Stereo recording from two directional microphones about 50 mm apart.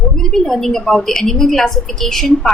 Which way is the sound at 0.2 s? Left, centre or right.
Centre.